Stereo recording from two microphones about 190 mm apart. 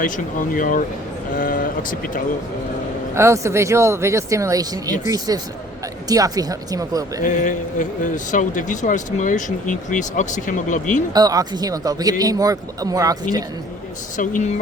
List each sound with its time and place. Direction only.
0.0 s speech: 45° left (ahead or behind)
3.2 s speech: 15° right (ahead or behind)
7.2 s speech: 40° left (ahead or behind)
11.1 s speech: 20° right (ahead or behind)
14.2 s speech: 40° left (ahead or behind)